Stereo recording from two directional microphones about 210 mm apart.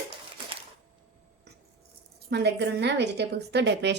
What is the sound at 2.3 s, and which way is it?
A woman's voice, 50° right (ahead or behind).